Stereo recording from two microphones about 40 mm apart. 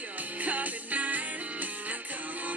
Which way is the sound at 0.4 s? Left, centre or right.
Right.